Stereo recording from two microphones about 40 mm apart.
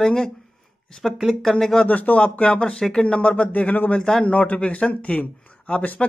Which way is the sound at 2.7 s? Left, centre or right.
Centre.